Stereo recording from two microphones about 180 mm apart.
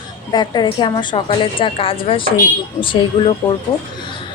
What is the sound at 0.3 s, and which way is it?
A woman's voice, 25° left (ahead or behind).